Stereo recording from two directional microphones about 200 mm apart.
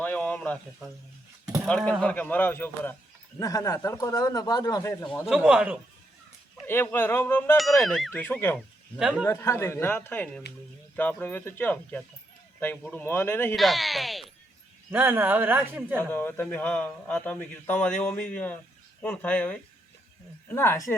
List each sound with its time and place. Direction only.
0.0 s a sound: 10° left (ahead or behind)
1.6 s a man's voice: 5° left (ahead or behind)
5.3 s a man's voice: 5° right (ahead or behind)
6.7 s a man's voice: 10° left (ahead or behind)
9.0 s a man's voice: 5° right (ahead or behind)
9.2 s a man's voice: 15° left (ahead or behind)
14.8 s a man's voice: 10° right (ahead or behind)
16.0 s a man's voice: 10° left (ahead or behind)